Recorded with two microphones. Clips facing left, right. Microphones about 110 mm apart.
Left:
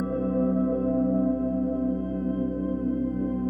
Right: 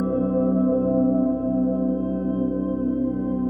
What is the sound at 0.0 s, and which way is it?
Music, 30° right (ahead or behind).